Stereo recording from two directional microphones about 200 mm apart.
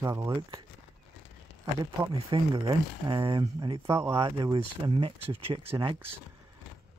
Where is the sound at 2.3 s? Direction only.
20° right (ahead or behind).